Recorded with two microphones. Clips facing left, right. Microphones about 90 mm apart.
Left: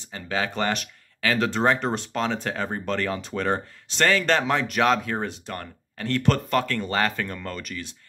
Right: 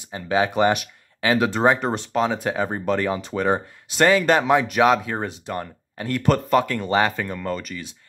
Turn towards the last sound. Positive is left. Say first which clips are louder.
# right 5 dB
turn(degrees=0)  # may be behind; listen again after turning